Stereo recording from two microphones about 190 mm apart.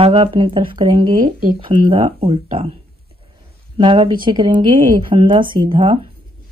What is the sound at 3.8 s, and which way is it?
Speech, 25° right (ahead or behind).